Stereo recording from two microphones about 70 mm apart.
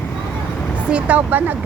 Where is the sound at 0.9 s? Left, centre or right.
Centre.